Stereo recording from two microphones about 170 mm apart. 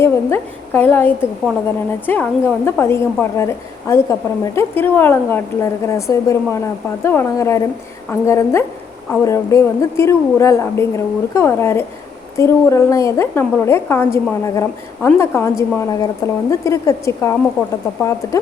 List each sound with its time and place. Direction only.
0.0 s a woman's voice: 15° left (ahead or behind)